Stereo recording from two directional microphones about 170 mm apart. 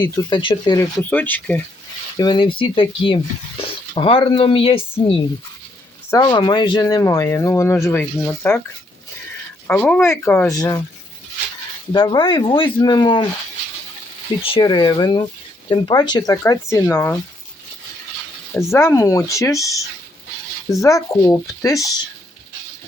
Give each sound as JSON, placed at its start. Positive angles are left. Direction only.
{"t": 0.0, "sound": "speech", "side_deg": 25}
{"t": 1.1, "sound": "speech", "side_deg": 10}
{"t": 2.1, "sound": "speech", "side_deg": 25}
{"t": 9.6, "sound": "speech", "side_deg": 10}
{"t": 11.9, "sound": "speech", "side_deg": 25}
{"t": 14.4, "sound": "speech", "side_deg": 30}
{"t": 18.5, "sound": "speech", "side_deg": 15}